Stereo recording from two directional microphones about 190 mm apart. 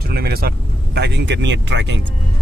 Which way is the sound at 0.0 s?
55° right (ahead or behind).